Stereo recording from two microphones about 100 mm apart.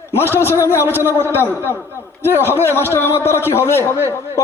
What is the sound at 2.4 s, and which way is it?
A man's voice, 25° left (ahead or behind).